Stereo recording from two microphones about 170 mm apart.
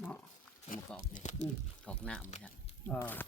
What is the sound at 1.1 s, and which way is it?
Speech, 45° left (ahead or behind).